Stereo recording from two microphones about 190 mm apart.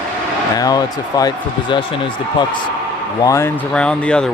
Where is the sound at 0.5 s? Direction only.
20° left (ahead or behind).